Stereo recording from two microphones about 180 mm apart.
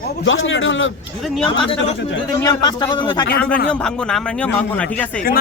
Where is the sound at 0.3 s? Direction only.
90° left.